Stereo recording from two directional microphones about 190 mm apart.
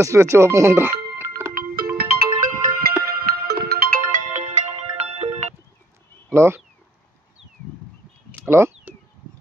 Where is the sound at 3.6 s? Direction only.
50° right (ahead or behind); by 5.4 s 35° right (ahead or behind).